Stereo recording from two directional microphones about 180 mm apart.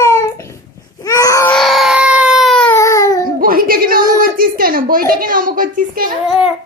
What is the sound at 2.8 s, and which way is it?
Baby cry, 15° left (ahead or behind).